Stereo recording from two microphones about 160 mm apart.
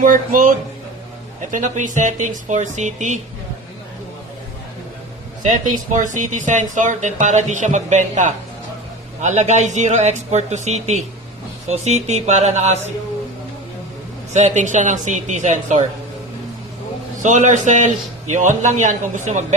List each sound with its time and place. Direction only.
0.0 s speech: 60° right (ahead or behind)
5.4 s speech: 50° right (ahead or behind)
14.3 s speech: 45° right (ahead or behind)
17.2 s speech: 50° right (ahead or behind)